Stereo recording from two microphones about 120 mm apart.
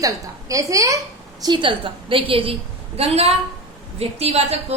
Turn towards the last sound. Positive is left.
turn(degrees=-60)  # may be behind; listen again after turning